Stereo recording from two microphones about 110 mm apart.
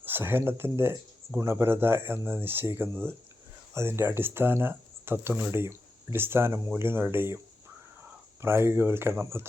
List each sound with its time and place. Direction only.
0.0 s speech: 20° right (ahead or behind)
8.4 s speech: 20° right (ahead or behind)